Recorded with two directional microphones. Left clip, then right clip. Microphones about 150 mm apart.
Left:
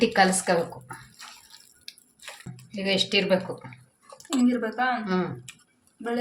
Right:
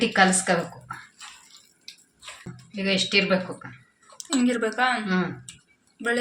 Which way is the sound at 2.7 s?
15° left (ahead or behind).